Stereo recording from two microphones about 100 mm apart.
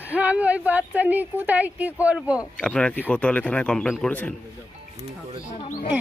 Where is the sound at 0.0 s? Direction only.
15° right (ahead or behind).